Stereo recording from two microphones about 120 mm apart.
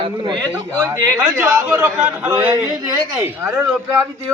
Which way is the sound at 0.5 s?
20° right (ahead or behind).